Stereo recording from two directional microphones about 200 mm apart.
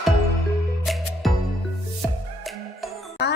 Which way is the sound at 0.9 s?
Centre (ahead or behind).